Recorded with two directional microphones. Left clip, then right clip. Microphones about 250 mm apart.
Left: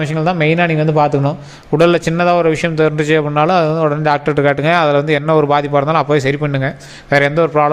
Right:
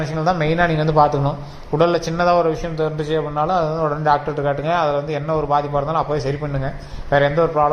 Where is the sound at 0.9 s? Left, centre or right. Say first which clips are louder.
Left 2 dB; left.